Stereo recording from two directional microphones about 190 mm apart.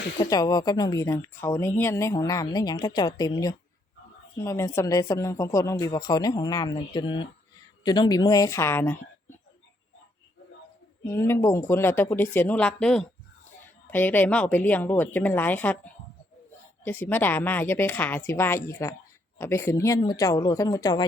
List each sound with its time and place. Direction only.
0.2 s speech: 20° left (ahead or behind)
11.3 s speech: 15° left (ahead or behind)